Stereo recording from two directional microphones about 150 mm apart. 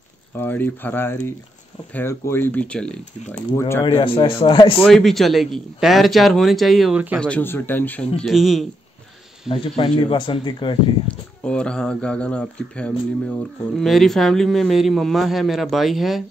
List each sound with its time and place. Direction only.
0.4 s speech: 15° left (ahead or behind)
3.8 s speech: 35° left (ahead or behind)
4.8 s speech: centre (ahead or behind)
7.2 s speech: 10° left (ahead or behind)
8.2 s speech: centre (ahead or behind)
9.5 s speech: 35° left (ahead or behind)
11.1 s speech: 5° left (ahead or behind)